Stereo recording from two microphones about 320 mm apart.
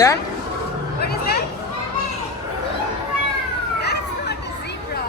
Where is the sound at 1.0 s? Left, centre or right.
Left.